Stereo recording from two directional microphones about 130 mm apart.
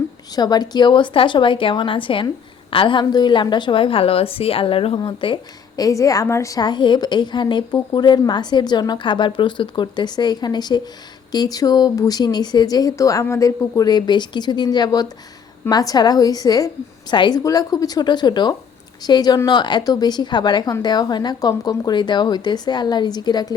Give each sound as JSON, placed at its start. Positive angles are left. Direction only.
{"t": 0.3, "sound": "a woman's voice", "side_deg": 30}